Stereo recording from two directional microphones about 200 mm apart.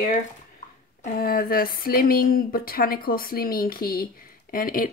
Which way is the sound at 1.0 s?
50° left (ahead or behind).